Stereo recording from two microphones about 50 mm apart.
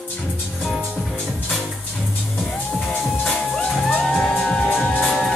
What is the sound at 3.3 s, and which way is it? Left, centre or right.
Music, centre.